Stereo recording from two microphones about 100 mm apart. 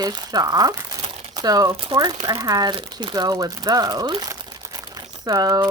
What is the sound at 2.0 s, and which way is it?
Speech, 45° right (ahead or behind).